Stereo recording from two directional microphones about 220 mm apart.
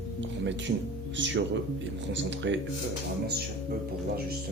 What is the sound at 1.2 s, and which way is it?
Speech, 55° right (ahead or behind).